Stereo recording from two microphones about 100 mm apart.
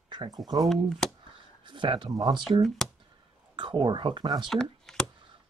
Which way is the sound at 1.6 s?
50° right (ahead or behind).